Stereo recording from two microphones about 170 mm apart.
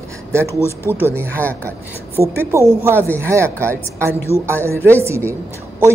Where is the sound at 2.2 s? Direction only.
20° right (ahead or behind).